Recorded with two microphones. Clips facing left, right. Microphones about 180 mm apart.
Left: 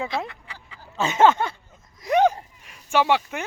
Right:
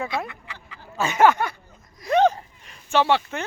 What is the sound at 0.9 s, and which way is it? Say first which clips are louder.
Speech: even; 25° left (ahead or behind).